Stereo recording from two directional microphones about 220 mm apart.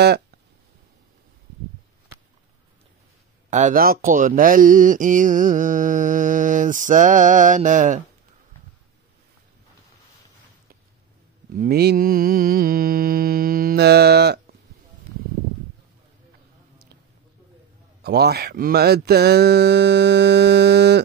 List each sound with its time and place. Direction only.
0.0 s speech: 50° right (ahead or behind)
3.4 s speech: 35° right (ahead or behind)
11.5 s speech: 40° right (ahead or behind)
18.0 s speech: 45° right (ahead or behind)